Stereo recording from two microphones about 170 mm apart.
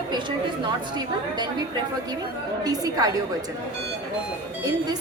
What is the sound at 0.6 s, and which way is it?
A woman's voice, 25° right (ahead or behind).